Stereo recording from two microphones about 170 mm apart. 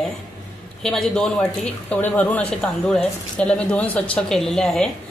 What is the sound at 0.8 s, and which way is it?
A woman's voice, centre (ahead or behind).